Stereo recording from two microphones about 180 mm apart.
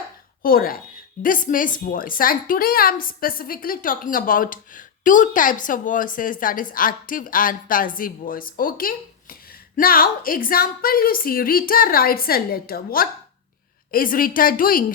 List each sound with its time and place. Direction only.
0.4 s a woman's voice: 55° left (ahead or behind)